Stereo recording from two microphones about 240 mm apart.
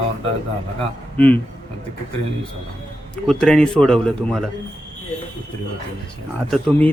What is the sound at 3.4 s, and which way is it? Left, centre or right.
Speech, centre.